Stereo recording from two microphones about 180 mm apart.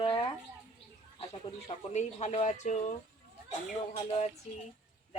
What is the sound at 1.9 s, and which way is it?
Speech, 35° left (ahead or behind).